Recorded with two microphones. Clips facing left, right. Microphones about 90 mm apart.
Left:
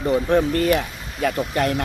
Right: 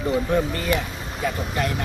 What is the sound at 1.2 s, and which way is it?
Speech, 55° left (ahead or behind).